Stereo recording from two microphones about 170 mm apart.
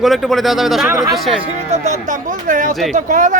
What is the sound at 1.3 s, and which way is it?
Speech, 40° right (ahead or behind).